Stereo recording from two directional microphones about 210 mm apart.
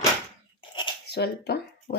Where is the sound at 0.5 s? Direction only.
25° left (ahead or behind).